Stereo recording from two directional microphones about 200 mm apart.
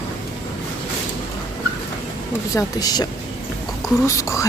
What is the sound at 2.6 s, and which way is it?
Speech, 20° left (ahead or behind).